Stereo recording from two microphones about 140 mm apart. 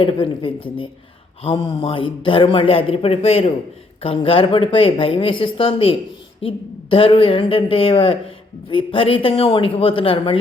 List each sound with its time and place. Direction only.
0.0 s a woman's voice: 40° left (ahead or behind)